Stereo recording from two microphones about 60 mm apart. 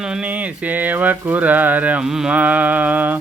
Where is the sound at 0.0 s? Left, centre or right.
Centre.